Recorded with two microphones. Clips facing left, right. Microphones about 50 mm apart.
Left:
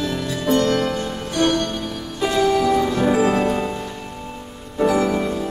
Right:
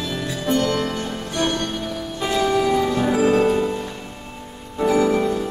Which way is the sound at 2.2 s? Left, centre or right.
Centre.